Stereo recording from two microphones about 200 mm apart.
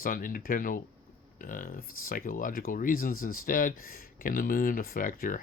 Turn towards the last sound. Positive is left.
turn(degrees=45)  # may be behind; listen again after turning